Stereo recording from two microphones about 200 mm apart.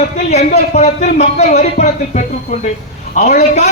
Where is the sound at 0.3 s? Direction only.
35° left (ahead or behind).